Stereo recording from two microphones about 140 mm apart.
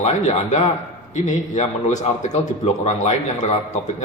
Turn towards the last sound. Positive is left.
turn(degrees=55)  # may be behind; listen again after turning